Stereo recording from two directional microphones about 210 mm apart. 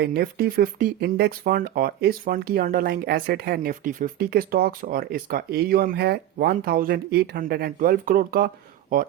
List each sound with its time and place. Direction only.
0.0 s speech: 50° right (ahead or behind)